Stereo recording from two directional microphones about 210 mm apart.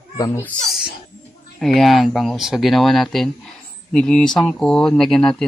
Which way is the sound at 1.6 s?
Centre (ahead or behind).